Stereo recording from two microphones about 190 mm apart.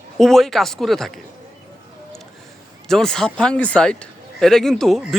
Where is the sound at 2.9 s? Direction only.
5° left (ahead or behind).